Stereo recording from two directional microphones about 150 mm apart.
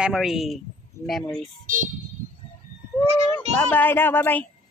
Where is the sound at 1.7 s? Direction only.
65° right (ahead or behind).